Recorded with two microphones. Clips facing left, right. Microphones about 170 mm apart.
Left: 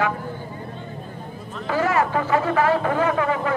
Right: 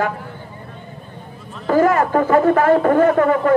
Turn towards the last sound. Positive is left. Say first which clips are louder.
# right 7 dB
turn(degrees=-45)  # may be behind; listen again after turning